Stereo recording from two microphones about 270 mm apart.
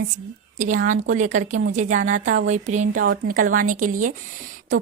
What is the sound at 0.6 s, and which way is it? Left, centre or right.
A woman's voice, right.